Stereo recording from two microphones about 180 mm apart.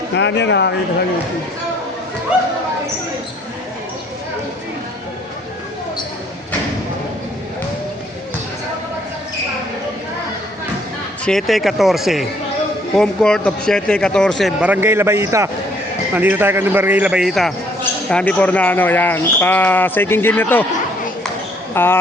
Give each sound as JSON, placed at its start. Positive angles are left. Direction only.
{"t": 0.1, "sound": "speech", "side_deg": 75}
{"t": 2.3, "sound": "speech", "side_deg": -5}
{"t": 11.3, "sound": "speech", "side_deg": 0}
{"t": 21.7, "sound": "speech", "side_deg": 10}